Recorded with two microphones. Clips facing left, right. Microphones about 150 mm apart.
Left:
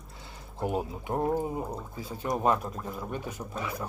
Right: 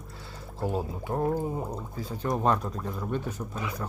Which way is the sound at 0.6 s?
15° left (ahead or behind).